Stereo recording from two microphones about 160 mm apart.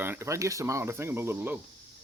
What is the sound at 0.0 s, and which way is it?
Speech, 15° right (ahead or behind).